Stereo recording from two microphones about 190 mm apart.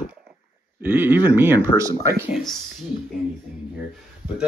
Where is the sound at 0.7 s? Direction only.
10° right (ahead or behind).